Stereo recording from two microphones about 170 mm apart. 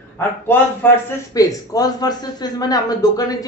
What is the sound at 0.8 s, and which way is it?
Speech, 10° left (ahead or behind).